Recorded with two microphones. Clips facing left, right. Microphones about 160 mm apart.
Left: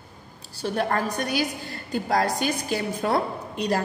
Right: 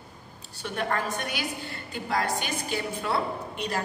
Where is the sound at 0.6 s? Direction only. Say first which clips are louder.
Left 5 dB; 35° left (ahead or behind).